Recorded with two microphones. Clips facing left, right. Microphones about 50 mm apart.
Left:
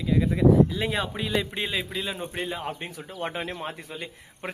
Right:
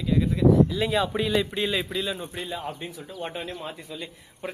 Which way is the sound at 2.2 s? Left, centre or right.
Left.